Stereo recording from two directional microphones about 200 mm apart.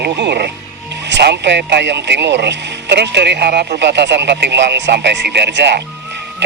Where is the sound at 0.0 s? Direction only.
55° right (ahead or behind).